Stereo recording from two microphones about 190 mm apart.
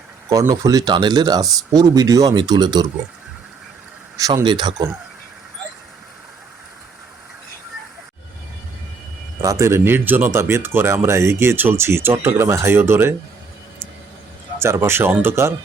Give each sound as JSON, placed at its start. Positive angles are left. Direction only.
{"t": 0.3, "sound": "speech", "side_deg": -20}
{"t": 4.2, "sound": "speech", "side_deg": -20}
{"t": 9.4, "sound": "speech", "side_deg": -15}
{"t": 14.6, "sound": "speech", "side_deg": -15}